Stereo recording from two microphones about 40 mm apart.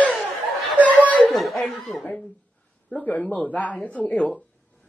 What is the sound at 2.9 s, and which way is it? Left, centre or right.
Speech, left.